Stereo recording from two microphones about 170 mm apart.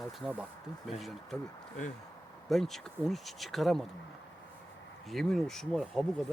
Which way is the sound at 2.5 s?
Centre (ahead or behind).